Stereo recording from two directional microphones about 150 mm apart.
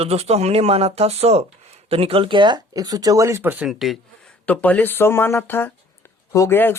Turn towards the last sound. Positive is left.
turn(degrees=15)  # may be behind; listen again after turning